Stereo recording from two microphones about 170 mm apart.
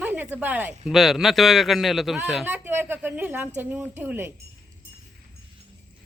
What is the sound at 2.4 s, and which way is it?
Speech, 10° right (ahead or behind).